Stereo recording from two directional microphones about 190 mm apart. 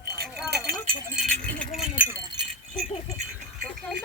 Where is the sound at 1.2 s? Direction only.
5° left (ahead or behind).